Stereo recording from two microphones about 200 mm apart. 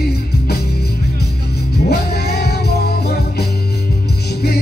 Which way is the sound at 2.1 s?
55° left (ahead or behind).